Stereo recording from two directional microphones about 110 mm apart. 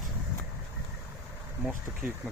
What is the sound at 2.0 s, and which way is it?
Speech, 15° right (ahead or behind).